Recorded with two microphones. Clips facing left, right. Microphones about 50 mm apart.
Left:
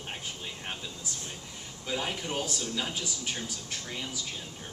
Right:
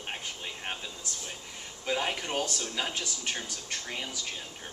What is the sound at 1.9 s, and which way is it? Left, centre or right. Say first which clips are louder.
Speech: right 2 dB; centre.